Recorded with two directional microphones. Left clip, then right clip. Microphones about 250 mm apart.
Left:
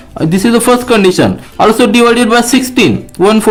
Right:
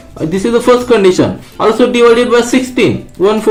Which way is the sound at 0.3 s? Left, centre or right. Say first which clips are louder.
Even; left.